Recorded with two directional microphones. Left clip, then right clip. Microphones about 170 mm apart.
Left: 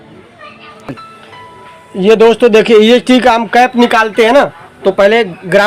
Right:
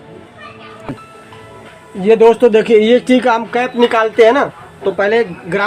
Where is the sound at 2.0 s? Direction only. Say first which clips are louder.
Left 2 dB; 50° left (ahead or behind); by 5.6 s 80° left.